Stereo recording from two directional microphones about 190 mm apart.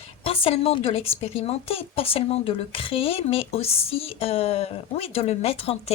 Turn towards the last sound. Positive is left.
turn(degrees=30)  # may be behind; listen again after turning